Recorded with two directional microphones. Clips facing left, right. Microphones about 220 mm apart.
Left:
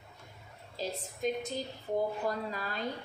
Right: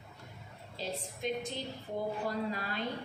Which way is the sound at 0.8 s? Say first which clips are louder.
Left 3 dB; 45° left (ahead or behind).